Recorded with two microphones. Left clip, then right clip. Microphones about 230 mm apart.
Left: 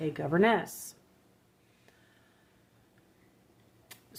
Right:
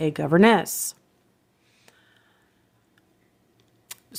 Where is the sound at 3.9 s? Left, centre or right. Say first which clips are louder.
Right 9 dB; right.